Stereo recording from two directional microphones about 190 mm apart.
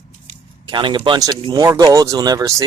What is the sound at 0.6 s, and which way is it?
Speech, 25° right (ahead or behind).